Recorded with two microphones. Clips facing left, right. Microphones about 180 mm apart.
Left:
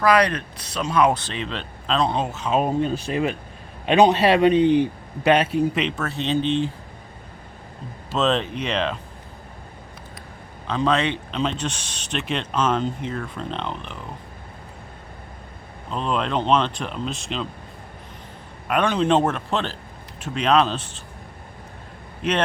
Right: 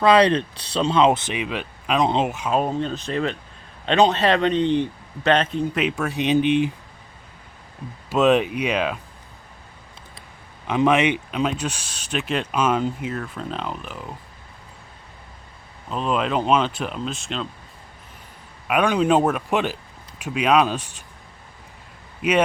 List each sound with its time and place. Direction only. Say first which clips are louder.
0.0 s speech: right 3 dB; 25° right (ahead or behind)
2.5 s speech: left 6 dB; 5° left (ahead or behind)
5.7 s speech: right 2 dB; 10° right (ahead or behind)
8.1 s speech: right 4 dB; 10° right (ahead or behind)
10.7 s speech: right 3 dB; 15° right (ahead or behind)
15.9 s speech: right 1 dB; 5° right (ahead or behind)
18.7 s speech: right 1 dB; 10° right (ahead or behind)
22.2 s speech: right 3 dB; 10° right (ahead or behind)